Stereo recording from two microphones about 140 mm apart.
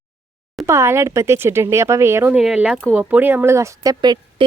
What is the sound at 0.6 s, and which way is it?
Speech, 20° right (ahead or behind).